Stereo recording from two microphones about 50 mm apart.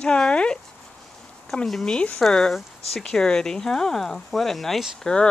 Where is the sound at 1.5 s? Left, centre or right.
Centre.